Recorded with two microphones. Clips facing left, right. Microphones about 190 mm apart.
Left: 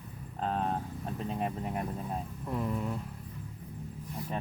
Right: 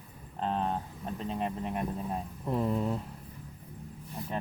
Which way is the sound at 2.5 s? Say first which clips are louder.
Right 4 dB; 30° right (ahead or behind).